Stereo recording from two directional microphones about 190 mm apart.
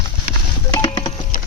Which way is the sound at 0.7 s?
20° left (ahead or behind).